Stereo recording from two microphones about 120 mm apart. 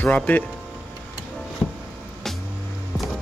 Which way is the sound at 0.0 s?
10° left (ahead or behind).